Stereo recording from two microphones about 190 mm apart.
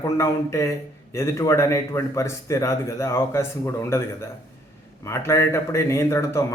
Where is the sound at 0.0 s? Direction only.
15° left (ahead or behind).